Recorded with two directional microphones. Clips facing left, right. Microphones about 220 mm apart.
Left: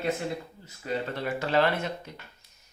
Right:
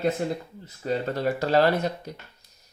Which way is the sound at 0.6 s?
40° right (ahead or behind).